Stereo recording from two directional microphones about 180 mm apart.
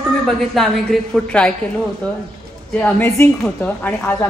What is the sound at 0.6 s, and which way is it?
Speech, 5° left (ahead or behind).